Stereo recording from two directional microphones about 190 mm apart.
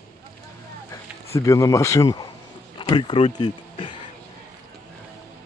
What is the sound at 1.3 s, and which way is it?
Speech, 15° left (ahead or behind).